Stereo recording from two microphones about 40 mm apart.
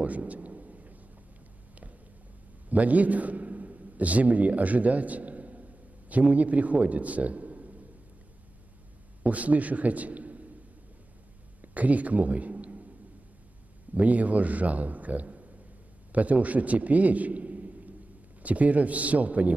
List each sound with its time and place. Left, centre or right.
0.0 s a sound: right
2.7 s a man's voice: right
9.2 s a man's voice: right
11.6 s a man's voice: right
13.9 s a man's voice: right